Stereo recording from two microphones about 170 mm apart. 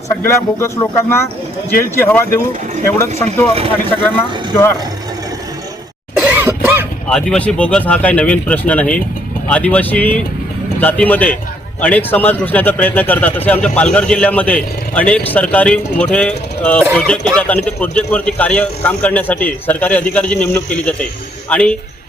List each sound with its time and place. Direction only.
0.2 s speech: 15° left (ahead or behind)
6.1 s cough: 10° right (ahead or behind)
7.1 s speech: 5° left (ahead or behind)